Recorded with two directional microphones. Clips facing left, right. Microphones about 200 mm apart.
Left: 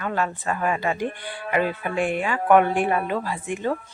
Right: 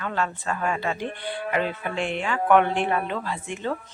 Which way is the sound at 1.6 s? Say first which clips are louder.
Left 3 dB; 50° left (ahead or behind).